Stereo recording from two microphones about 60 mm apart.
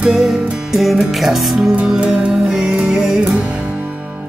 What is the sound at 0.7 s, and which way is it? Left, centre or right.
Music, centre.